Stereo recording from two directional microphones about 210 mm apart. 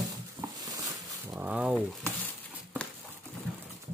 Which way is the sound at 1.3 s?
5° right (ahead or behind).